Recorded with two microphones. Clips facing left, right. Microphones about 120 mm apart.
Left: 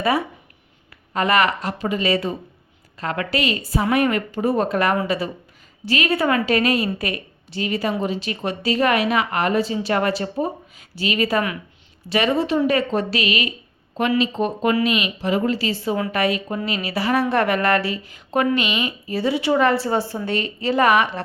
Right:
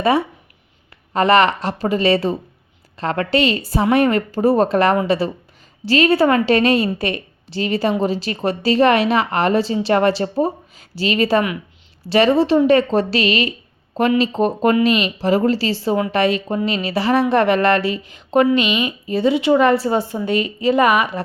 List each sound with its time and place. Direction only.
1.1 s a woman's voice: 30° right (ahead or behind); by 21.2 s 15° right (ahead or behind)